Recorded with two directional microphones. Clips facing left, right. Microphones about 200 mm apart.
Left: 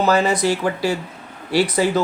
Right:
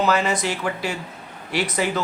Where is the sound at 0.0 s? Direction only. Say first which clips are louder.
Left 4 dB; 35° left (ahead or behind).